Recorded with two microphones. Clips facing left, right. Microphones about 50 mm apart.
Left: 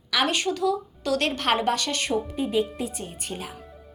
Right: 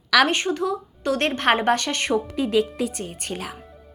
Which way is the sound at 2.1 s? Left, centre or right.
Right.